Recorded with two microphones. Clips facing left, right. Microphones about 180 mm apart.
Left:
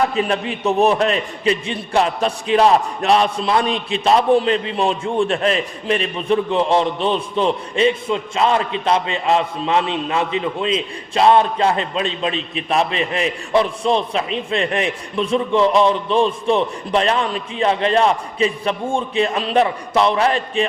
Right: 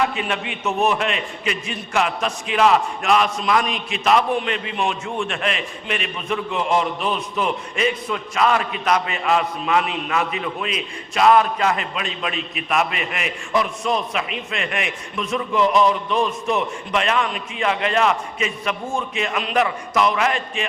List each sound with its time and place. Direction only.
0.0 s a man's voice: 35° left (ahead or behind)